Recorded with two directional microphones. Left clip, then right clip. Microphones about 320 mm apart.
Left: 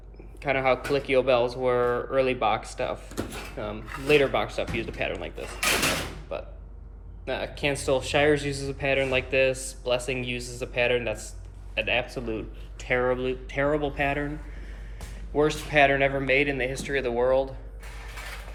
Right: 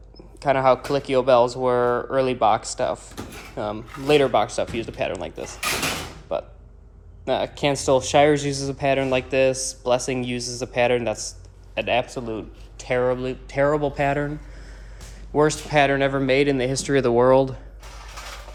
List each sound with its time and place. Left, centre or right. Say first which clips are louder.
0.4 s speech: right 6 dB; centre
15.4 s speech: right 3 dB; centre